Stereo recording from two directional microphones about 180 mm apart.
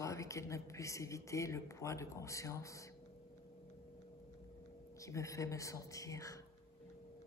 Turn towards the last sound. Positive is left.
turn(degrees=20)  # may be behind; listen again after turning